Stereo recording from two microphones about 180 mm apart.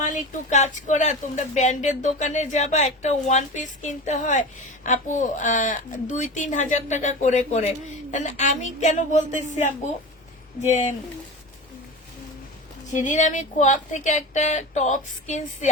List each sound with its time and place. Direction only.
0.0 s speech: 45° left (ahead or behind)
12.9 s speech: 45° left (ahead or behind)